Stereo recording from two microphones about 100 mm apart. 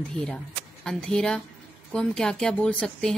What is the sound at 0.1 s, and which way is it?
A woman's voice, 5° left (ahead or behind).